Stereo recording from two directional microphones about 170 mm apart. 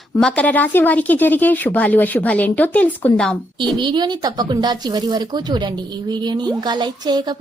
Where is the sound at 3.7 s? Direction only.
25° right (ahead or behind).